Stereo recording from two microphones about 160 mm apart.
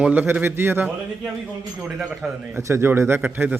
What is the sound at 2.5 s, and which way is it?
Speech, 15° right (ahead or behind).